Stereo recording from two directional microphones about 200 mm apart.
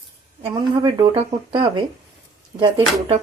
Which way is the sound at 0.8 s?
25° right (ahead or behind).